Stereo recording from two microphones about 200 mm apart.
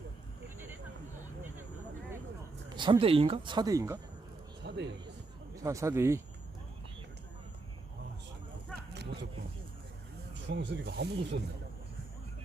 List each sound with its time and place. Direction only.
2.6 s speech: 20° right (ahead or behind)
4.6 s a sound: 60° right (ahead or behind)
5.5 s speech: 15° right (ahead or behind)
10.4 s speech: 60° right (ahead or behind)